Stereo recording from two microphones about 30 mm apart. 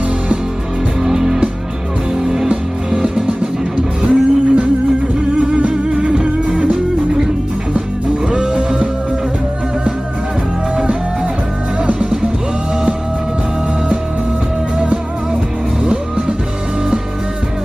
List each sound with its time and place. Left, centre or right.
1.0 s music: centre
2.4 s music: right
8.3 s music: right
12.0 s music: right
15.8 s music: right